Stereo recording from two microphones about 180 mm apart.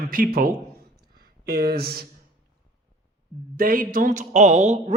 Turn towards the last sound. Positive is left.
turn(degrees=-40)  # may be behind; listen again after turning